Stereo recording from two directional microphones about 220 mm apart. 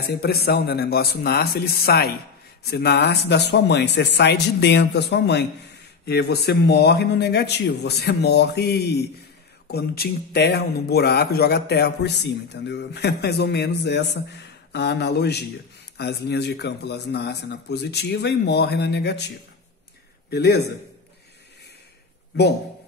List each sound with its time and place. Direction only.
0.0 s speech: 45° left (ahead or behind)